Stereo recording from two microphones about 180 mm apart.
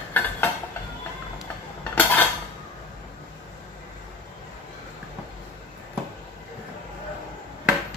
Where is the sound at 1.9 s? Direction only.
10° left (ahead or behind).